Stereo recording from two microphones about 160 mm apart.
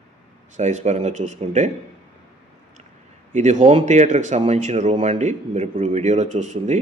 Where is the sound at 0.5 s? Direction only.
45° right (ahead or behind).